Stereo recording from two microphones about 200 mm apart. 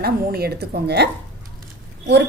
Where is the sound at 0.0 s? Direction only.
50° right (ahead or behind).